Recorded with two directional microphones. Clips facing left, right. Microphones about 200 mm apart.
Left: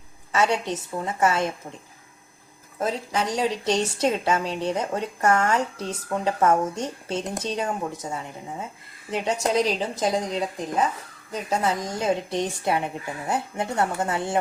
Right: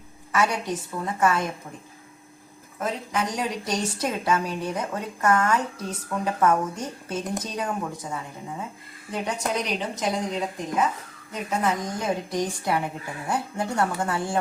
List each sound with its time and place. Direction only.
0.3 s a woman's voice: 25° left (ahead or behind)
2.7 s a woman's voice: 30° left (ahead or behind)